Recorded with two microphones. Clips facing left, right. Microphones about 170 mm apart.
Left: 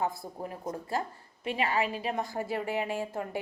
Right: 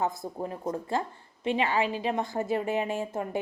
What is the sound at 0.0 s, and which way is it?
Speech, 20° right (ahead or behind).